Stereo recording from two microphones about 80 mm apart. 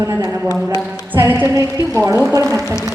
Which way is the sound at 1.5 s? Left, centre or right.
Right.